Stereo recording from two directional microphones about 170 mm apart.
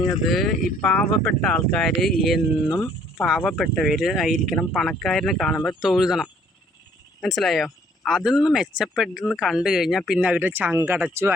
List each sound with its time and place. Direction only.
0.1 s speech: centre (ahead or behind)
2.6 s speech: 20° left (ahead or behind)
3.2 s speech: centre (ahead or behind)
3.4 s speech: 10° left (ahead or behind)
3.8 s speech: centre (ahead or behind)